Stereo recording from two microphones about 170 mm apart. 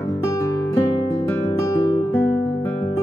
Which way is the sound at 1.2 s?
15° left (ahead or behind).